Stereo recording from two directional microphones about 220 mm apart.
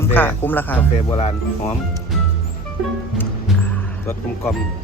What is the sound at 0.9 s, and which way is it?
Speech, 30° left (ahead or behind).